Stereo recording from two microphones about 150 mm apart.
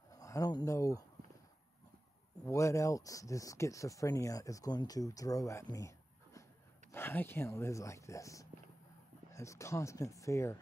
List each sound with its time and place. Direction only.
0.1 s speech: 20° left (ahead or behind)
2.4 s speech: 20° left (ahead or behind)